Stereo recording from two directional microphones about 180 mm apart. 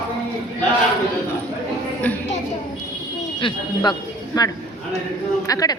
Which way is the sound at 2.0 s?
10° left (ahead or behind).